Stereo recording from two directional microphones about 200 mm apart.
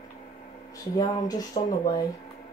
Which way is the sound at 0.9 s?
20° left (ahead or behind).